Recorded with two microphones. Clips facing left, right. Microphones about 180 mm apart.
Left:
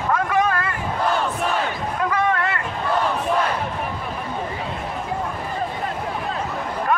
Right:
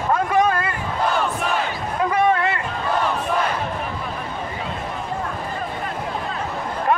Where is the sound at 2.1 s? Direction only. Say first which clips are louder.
Right 4 dB; 25° right (ahead or behind).